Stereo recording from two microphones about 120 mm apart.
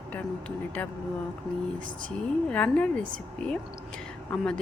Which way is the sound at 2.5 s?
10° left (ahead or behind).